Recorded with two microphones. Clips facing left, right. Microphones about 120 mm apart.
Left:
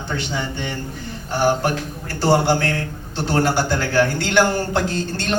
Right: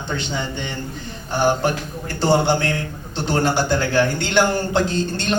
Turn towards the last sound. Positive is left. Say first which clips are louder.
# right 1 dB
turn(degrees=-20)  # may be behind; listen again after turning